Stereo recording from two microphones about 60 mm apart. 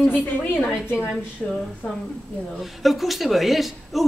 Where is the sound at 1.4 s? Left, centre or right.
Centre.